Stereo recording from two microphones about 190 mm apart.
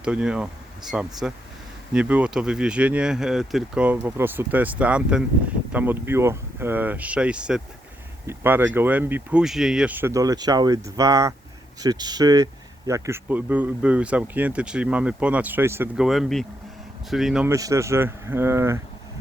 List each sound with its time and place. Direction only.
0.0 s speech: 5° right (ahead or behind)
17.5 s speech: 15° right (ahead or behind)